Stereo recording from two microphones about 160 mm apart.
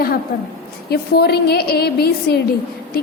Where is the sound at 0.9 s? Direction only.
80° left.